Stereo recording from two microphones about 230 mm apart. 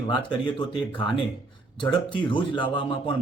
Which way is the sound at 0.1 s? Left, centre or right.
Left.